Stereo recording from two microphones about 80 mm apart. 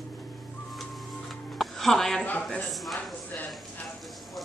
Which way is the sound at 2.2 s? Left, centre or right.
Centre.